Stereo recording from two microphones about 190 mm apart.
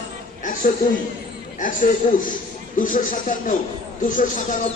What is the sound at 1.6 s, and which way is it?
Speech, 45° left (ahead or behind).